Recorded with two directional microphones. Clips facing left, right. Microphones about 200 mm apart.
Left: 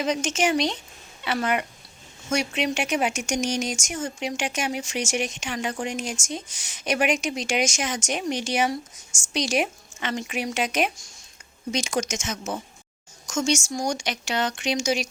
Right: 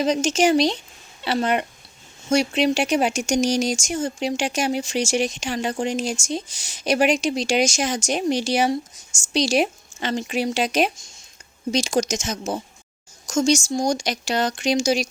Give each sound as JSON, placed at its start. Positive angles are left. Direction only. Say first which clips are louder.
{"t": 0.0, "sound": "speech", "louder": "right 5 dB", "side_deg": -35}